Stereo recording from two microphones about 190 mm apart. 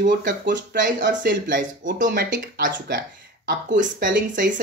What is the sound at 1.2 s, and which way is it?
Speech, 45° right (ahead or behind).